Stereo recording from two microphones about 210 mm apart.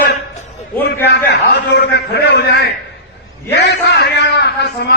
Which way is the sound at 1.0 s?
50° left (ahead or behind).